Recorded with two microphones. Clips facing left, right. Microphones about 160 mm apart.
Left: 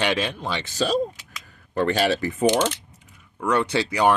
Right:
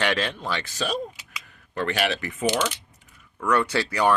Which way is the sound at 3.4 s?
20° left (ahead or behind).